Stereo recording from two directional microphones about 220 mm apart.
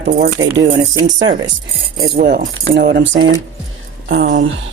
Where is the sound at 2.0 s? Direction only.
45° right (ahead or behind).